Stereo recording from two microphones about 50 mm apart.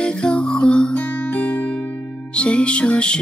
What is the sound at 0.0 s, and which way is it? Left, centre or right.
Music, left.